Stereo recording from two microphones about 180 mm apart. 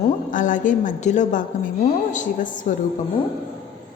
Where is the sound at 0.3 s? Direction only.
45° left (ahead or behind).